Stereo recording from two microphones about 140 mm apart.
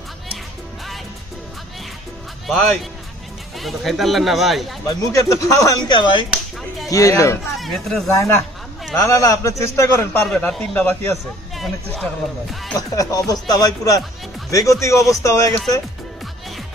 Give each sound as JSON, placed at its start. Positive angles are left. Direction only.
{"t": 2.4, "sound": "a man's voice", "side_deg": 5}
{"t": 4.8, "sound": "a man's voice", "side_deg": 25}
{"t": 5.7, "sound": "speech", "side_deg": 35}
{"t": 6.9, "sound": "a man's voice", "side_deg": 25}
{"t": 7.5, "sound": "speech", "side_deg": 0}
{"t": 8.1, "sound": "a man's voice", "side_deg": 20}
{"t": 10.2, "sound": "a man's voice", "side_deg": 5}
{"t": 13.1, "sound": "a man's voice", "side_deg": 25}